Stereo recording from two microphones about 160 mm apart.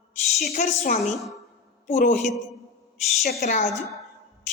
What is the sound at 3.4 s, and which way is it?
Speech, 45° left (ahead or behind).